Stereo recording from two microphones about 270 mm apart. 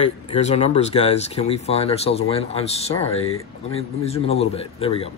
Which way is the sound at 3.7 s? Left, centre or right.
Left.